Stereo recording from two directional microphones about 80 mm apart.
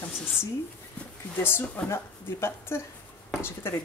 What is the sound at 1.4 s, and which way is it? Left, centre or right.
Speech, left.